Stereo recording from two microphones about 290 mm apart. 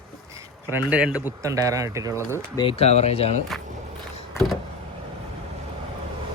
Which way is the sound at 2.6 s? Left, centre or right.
Centre.